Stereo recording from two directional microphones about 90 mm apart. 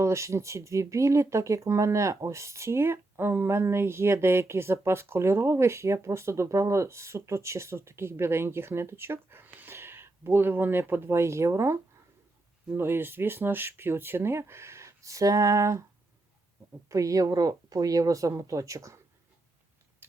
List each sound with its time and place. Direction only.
0.0 s speech: 35° right (ahead or behind)
16.9 s speech: 40° right (ahead or behind)
20.0 s scissors: 20° right (ahead or behind)